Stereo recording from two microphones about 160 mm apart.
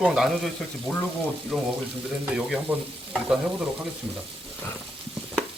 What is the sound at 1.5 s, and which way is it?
Frying, centre (ahead or behind).